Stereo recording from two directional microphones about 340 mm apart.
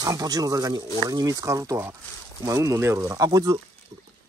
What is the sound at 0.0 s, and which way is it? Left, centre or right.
Speech, centre.